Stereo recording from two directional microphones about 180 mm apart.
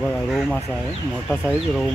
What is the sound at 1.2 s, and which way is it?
Speech, 5° left (ahead or behind).